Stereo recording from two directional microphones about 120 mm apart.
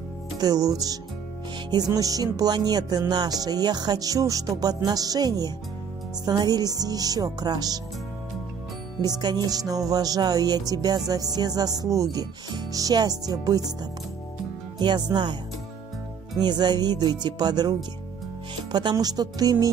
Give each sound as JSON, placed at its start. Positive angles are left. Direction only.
{"t": 0.4, "sound": "music", "side_deg": -30}
{"t": 9.0, "sound": "music", "side_deg": -35}
{"t": 14.8, "sound": "music", "side_deg": -35}
{"t": 16.3, "sound": "music", "side_deg": -35}